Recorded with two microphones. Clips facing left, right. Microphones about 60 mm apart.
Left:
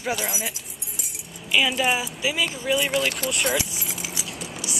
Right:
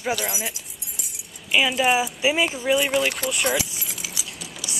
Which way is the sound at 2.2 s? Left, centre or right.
Right.